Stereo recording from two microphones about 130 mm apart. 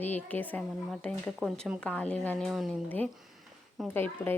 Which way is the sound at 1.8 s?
10° left (ahead or behind).